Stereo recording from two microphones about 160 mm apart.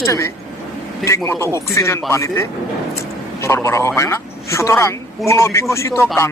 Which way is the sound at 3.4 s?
15° left (ahead or behind).